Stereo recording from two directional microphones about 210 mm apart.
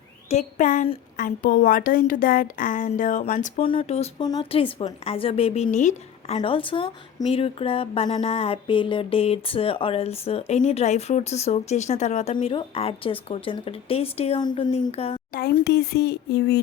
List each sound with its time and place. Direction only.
0.3 s a woman's voice: 35° left (ahead or behind)
3.6 s a woman's voice: 25° left (ahead or behind)
15.3 s speech: 50° left (ahead or behind)